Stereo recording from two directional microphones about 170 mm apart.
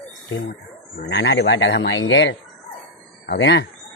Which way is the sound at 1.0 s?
85° left.